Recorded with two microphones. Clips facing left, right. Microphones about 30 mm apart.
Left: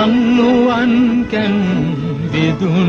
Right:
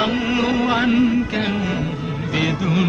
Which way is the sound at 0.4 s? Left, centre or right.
Centre.